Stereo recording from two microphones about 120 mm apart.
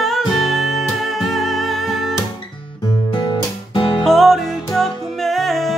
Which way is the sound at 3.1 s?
40° left (ahead or behind).